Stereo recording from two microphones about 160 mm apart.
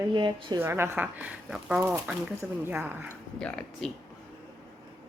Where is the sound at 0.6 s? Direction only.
15° right (ahead or behind).